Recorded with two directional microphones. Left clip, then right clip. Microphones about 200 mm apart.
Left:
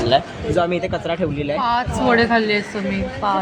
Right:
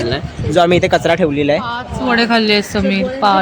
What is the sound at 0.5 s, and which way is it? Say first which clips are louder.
A man's voice: right 9 dB; 55° right (ahead or behind).